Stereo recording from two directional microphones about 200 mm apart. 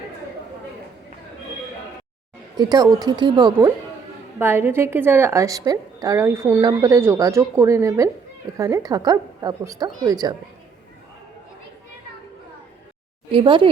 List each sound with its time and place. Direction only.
2.6 s speech: 20° right (ahead or behind)
4.4 s a woman's voice: 10° right (ahead or behind)
13.3 s speech: 25° right (ahead or behind)